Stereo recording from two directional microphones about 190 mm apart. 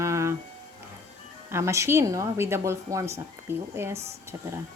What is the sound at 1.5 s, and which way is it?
Speech, 15° right (ahead or behind).